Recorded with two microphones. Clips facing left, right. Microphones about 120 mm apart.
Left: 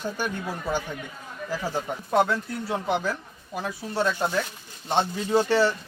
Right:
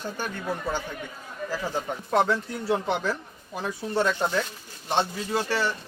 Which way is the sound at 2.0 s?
5° left (ahead or behind).